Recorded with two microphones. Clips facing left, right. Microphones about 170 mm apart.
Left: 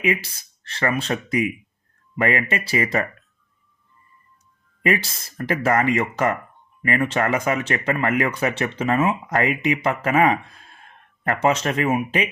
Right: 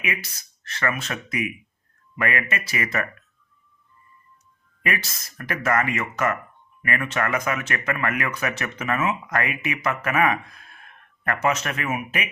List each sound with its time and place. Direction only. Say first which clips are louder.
0.0 s speech: left 8 dB; 30° left (ahead or behind)
4.9 s speech: left 6 dB; 30° left (ahead or behind)